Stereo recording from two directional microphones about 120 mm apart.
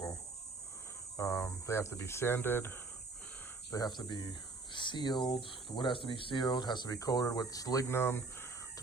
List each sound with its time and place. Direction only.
1.1 s speech: 20° left (ahead or behind)
3.7 s speech: 35° left (ahead or behind); by 8.4 s 20° left (ahead or behind)